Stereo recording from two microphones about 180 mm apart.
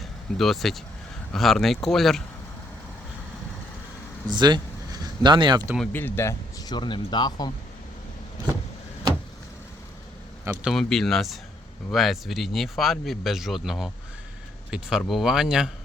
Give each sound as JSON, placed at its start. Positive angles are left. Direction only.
{"t": 0.3, "sound": "speech", "side_deg": 0}
{"t": 4.3, "sound": "speech", "side_deg": -25}
{"t": 5.9, "sound": "speech", "side_deg": 10}
{"t": 10.4, "sound": "speech", "side_deg": -5}